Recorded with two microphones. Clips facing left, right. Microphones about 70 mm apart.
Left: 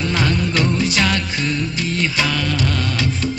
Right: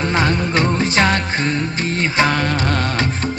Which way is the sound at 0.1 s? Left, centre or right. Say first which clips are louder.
Right 2 dB; right.